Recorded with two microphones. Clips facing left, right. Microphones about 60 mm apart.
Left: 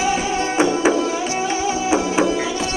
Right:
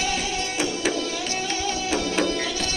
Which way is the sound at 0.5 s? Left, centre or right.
Left.